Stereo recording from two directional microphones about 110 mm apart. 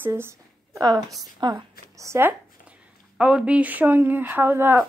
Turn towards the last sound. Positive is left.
turn(degrees=-20)  # may be behind; listen again after turning